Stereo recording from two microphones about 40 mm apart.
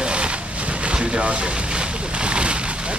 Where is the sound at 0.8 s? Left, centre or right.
Right.